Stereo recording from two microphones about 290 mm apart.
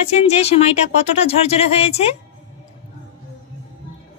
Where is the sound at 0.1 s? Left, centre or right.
Left.